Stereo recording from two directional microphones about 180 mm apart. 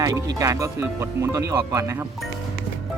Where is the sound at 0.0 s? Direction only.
20° right (ahead or behind).